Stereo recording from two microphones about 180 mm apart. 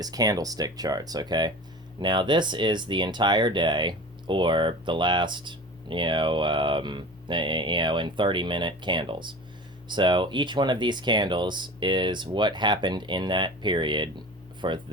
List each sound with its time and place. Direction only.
0.0 s speech: 20° right (ahead or behind)